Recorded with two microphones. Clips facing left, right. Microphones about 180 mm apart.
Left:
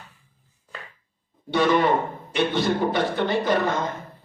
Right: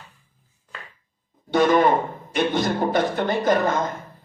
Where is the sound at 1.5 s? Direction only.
45° right (ahead or behind).